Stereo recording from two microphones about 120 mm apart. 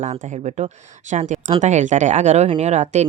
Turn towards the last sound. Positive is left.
turn(degrees=-70)  # may be behind; listen again after turning